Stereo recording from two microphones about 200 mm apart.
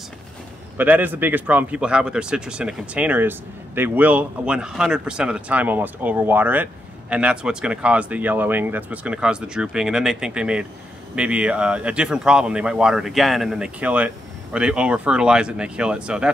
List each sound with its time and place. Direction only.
0.7 s speech: 10° right (ahead or behind)